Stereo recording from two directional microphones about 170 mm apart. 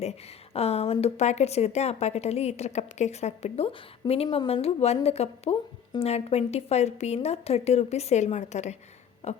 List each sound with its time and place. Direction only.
0.0 s a woman's voice: 40° left (ahead or behind)